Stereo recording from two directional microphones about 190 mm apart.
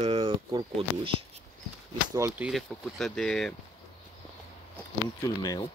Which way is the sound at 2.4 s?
Centre (ahead or behind).